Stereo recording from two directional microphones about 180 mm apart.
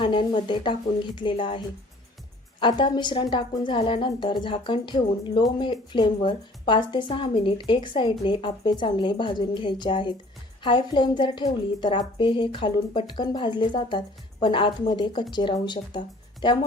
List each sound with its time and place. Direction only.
0.0 s a woman's voice: 25° left (ahead or behind)